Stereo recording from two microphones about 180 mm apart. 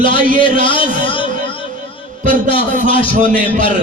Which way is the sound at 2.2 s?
30° left (ahead or behind).